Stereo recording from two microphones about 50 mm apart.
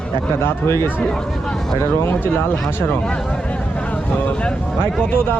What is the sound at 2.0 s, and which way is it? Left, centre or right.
Speech, left.